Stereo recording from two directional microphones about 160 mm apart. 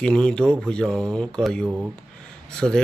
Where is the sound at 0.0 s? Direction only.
5° left (ahead or behind).